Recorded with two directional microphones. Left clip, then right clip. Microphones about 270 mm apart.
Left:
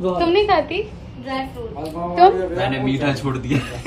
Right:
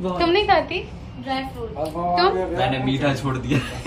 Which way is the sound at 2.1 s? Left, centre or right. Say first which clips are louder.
Left 7 dB; centre.